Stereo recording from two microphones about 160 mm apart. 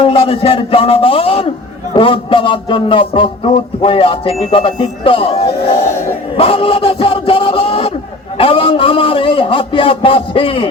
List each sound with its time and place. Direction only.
0.0 s a man's voice: 35° left (ahead or behind)